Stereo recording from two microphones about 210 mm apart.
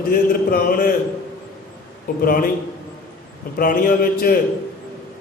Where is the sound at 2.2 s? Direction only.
40° left (ahead or behind).